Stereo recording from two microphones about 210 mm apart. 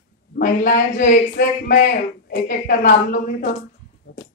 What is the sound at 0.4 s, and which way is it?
A woman's voice, 40° left (ahead or behind).